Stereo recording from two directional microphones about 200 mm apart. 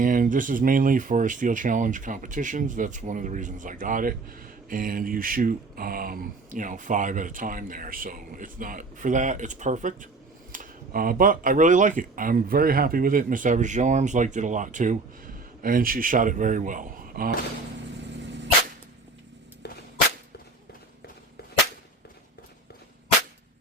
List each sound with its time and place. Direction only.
0.0 s speech: 40° right (ahead or behind)
18.1 s dog: 60° right (ahead or behind)
19.6 s a sound: 55° left (ahead or behind)